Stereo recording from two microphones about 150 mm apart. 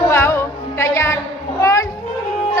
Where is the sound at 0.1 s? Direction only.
15° left (ahead or behind).